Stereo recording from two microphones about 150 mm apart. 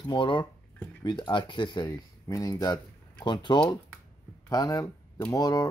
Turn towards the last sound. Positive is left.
turn(degrees=25)  # may be behind; listen again after turning